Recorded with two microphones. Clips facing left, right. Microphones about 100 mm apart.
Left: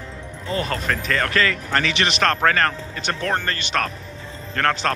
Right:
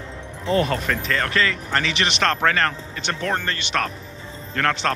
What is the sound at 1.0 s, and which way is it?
Speech, 25° right (ahead or behind).